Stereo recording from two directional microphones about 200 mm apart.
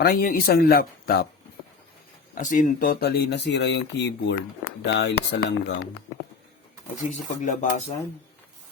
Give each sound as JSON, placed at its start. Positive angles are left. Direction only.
{"t": 0.0, "sound": "speech", "side_deg": 50}
{"t": 2.3, "sound": "speech", "side_deg": 40}
{"t": 7.0, "sound": "speech", "side_deg": 40}